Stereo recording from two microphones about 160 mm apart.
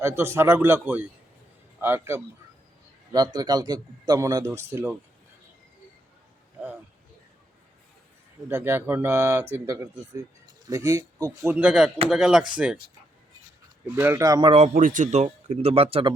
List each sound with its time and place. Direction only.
0.0 s a man's voice: 15° right (ahead or behind)
8.4 s a man's voice: 15° right (ahead or behind)
11.5 s speech: 5° right (ahead or behind)
13.9 s a man's voice: 15° right (ahead or behind)
14.7 s a man's voice: 60° right (ahead or behind); by 16.1 s 35° right (ahead or behind)